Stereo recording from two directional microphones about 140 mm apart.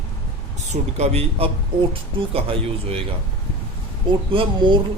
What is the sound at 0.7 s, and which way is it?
A man's voice, 50° right (ahead or behind).